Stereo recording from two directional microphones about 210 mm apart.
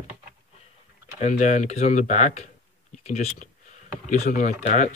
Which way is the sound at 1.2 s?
35° left (ahead or behind).